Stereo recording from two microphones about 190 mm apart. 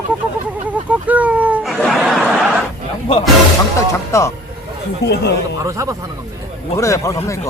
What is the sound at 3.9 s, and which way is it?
Speech, 15° left (ahead or behind).